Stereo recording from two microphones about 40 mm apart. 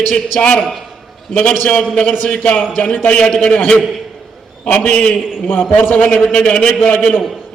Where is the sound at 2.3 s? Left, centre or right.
Left.